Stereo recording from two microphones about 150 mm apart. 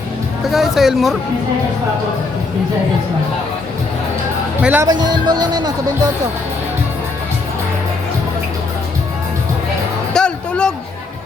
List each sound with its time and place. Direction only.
0.5 s speech: centre (ahead or behind)
4.6 s speech: 10° right (ahead or behind)
4.9 s speech: 25° right (ahead or behind)
10.1 s music: 5° left (ahead or behind)